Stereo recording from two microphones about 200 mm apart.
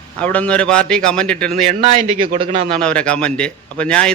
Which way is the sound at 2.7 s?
5° left (ahead or behind).